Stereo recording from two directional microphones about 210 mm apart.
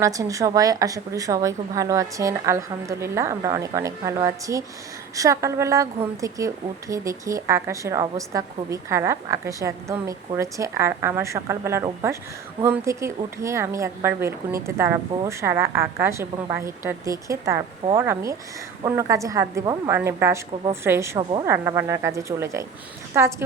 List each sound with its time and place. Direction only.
0.0 s speech: 15° right (ahead or behind)